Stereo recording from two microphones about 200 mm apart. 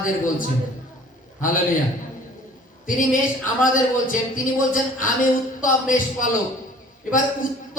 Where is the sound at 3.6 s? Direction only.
40° left (ahead or behind).